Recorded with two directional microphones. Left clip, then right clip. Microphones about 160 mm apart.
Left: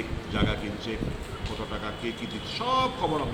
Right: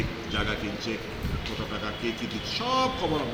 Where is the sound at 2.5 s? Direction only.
5° left (ahead or behind).